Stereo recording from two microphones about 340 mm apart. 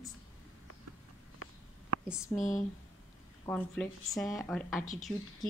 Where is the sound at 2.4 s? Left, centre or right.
Left.